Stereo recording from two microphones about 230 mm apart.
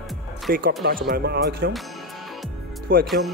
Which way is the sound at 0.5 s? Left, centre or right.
Right.